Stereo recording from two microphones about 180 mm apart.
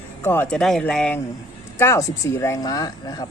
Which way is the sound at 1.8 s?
15° left (ahead or behind).